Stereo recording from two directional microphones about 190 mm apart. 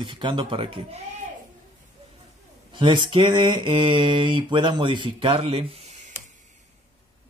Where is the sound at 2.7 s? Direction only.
25° right (ahead or behind).